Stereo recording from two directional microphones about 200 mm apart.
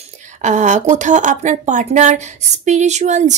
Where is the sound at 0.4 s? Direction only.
35° right (ahead or behind).